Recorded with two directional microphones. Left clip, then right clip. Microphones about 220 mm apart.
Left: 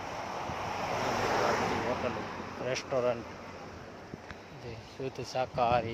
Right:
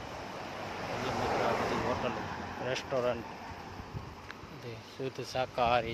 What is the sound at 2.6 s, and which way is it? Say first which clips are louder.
Speech: left 2 dB; centre (ahead or behind).